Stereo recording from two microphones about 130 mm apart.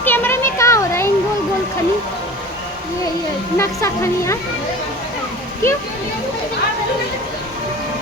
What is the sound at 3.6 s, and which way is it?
Speech, 20° left (ahead or behind).